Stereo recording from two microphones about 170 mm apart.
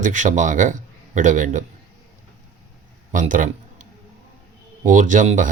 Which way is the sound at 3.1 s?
50° right (ahead or behind).